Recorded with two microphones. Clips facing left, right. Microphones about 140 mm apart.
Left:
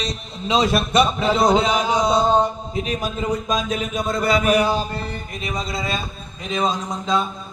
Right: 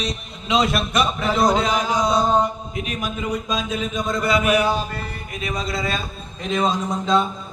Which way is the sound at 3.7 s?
5° left (ahead or behind).